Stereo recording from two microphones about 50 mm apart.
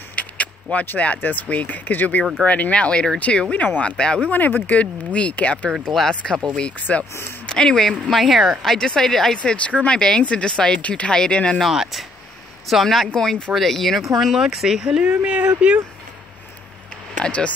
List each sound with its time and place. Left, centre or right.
0.1 s keys jangling: left
0.8 s speech: left
4.3 s speech: left
5.9 s a woman's voice: centre
6.2 s speech: left
8.1 s speech: centre
8.7 s a woman's voice: centre
9.4 s a woman's voice: left
11.6 s a woman's voice: centre; by 15.8 s right
17.2 s speech: left